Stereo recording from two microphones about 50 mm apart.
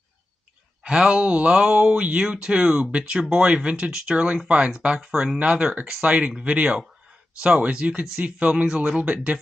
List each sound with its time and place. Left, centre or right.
0.8 s speech: centre